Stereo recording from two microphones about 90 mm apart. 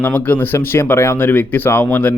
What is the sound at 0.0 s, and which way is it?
Speech, 20° left (ahead or behind).